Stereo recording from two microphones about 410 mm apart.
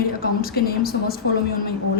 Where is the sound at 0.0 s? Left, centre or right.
Left.